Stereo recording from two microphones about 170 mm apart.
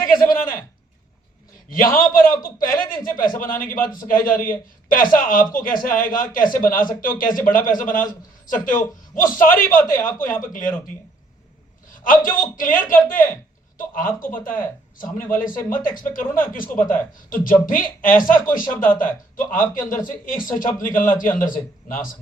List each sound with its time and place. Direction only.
0.0 s a sound: 55° left (ahead or behind)
1.7 s a man's voice: 55° left (ahead or behind)
11.9 s a man's voice: 50° left (ahead or behind)